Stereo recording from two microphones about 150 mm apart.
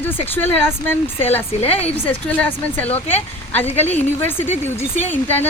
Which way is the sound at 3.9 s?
15° left (ahead or behind).